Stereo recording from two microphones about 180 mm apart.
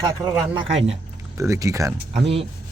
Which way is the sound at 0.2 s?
5° right (ahead or behind).